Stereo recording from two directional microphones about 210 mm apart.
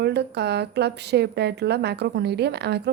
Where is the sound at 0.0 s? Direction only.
55° right (ahead or behind).